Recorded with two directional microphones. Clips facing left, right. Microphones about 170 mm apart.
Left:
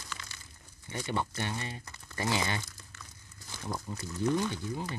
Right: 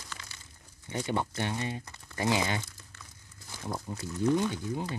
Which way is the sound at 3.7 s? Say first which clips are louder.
Right 2 dB; 15° right (ahead or behind).